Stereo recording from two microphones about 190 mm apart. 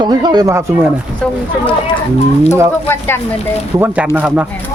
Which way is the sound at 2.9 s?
10° left (ahead or behind).